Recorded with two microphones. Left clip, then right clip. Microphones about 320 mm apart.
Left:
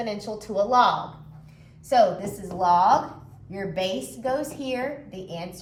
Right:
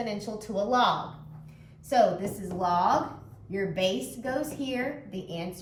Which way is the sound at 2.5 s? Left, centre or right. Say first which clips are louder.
Left 6 dB; centre.